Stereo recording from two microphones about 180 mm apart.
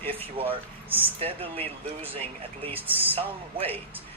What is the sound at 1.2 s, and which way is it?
Speech, 30° right (ahead or behind).